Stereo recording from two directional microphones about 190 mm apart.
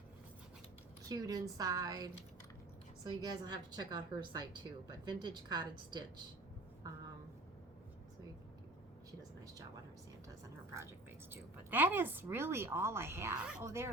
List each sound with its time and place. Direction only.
1.0 s a woman's voice: 20° right (ahead or behind)
11.3 s a woman's voice: 10° right (ahead or behind)